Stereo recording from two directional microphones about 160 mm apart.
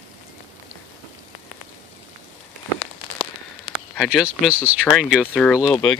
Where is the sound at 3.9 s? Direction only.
5° right (ahead or behind).